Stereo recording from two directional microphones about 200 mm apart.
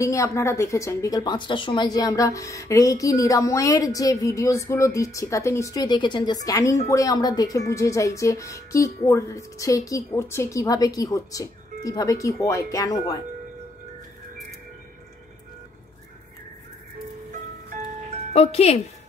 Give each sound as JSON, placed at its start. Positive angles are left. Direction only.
{"t": 0.0, "sound": "a woman's voice", "side_deg": 15}
{"t": 18.3, "sound": "speech", "side_deg": 30}